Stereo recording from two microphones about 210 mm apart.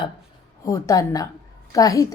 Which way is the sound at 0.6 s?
15° left (ahead or behind).